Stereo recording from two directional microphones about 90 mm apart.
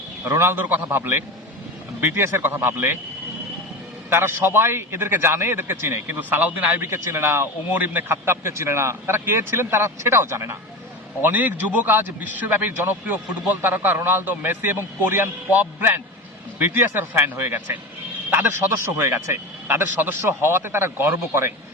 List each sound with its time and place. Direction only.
0.3 s a man's voice: 25° right (ahead or behind)
4.1 s a man's voice: 25° right (ahead or behind)
11.2 s a man's voice: 20° right (ahead or behind)